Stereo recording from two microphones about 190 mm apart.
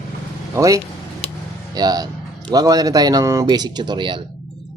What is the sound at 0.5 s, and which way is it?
Speech, 15° right (ahead or behind).